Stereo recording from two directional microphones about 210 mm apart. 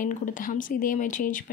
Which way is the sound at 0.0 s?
40° left (ahead or behind).